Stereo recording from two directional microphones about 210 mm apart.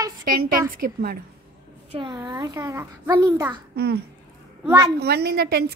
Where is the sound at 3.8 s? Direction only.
50° right (ahead or behind).